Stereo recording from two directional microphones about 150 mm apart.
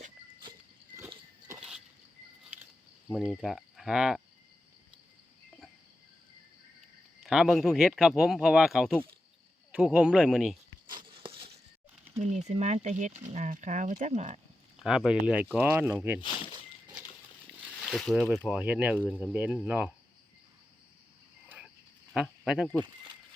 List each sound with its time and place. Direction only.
1.5 s a sound: 5° right (ahead or behind)
3.1 s speech: centre (ahead or behind)
7.3 s speech: 5° right (ahead or behind)
10.8 s a sound: 35° right (ahead or behind)
12.2 s speech: 50° right (ahead or behind)
14.8 s speech: 5° right (ahead or behind)
17.8 s speech: centre (ahead or behind)
22.1 s speech: 5° right (ahead or behind)